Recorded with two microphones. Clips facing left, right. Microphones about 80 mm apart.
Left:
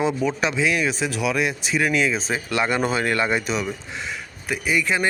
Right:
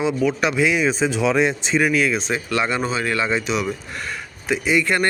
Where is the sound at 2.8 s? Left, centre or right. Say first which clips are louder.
Even; left.